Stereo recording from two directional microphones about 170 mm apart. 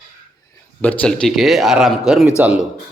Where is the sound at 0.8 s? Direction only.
10° left (ahead or behind).